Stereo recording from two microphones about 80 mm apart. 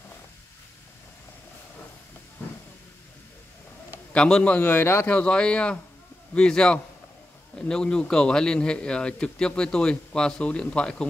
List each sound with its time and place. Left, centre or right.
2.4 s hiss: left
4.1 s a man's voice: centre
4.6 s speech: left
5.1 s a man's voice: centre